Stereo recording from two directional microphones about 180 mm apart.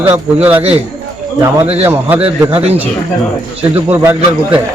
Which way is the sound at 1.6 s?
35° right (ahead or behind).